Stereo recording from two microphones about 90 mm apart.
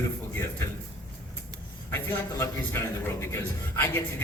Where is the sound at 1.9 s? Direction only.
30° left (ahead or behind).